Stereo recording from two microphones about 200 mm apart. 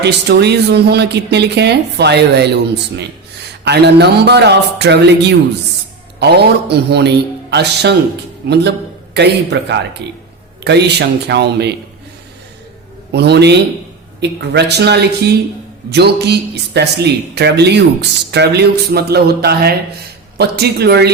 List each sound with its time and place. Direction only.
0.0 s speech: 55° right (ahead or behind)
13.1 s speech: 55° right (ahead or behind)